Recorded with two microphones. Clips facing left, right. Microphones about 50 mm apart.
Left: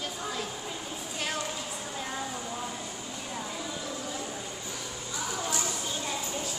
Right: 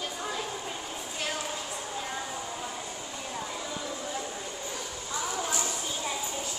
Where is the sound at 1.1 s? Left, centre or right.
Centre.